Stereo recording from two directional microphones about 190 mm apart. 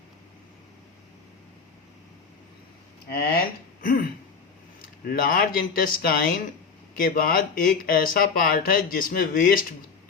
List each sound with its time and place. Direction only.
3.1 s speech: 55° left (ahead or behind)